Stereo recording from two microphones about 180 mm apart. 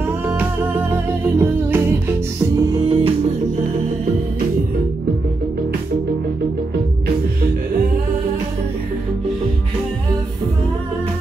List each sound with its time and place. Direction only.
0.3 s music: 10° right (ahead or behind)
2.7 s music: 30° right (ahead or behind)